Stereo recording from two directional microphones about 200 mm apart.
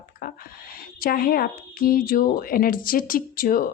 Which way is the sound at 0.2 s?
45° left (ahead or behind).